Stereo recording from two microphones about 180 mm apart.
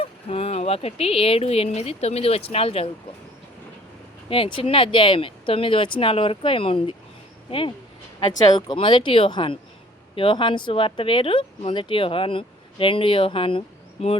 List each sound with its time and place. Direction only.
0.0 s speech: 30° left (ahead or behind)
4.3 s speech: 30° left (ahead or behind)
8.4 s speech: 25° left (ahead or behind)